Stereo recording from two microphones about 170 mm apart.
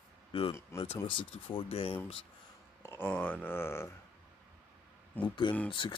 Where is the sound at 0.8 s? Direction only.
35° left (ahead or behind).